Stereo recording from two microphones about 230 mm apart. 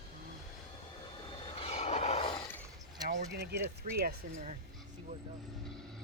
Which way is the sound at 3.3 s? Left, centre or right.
Right.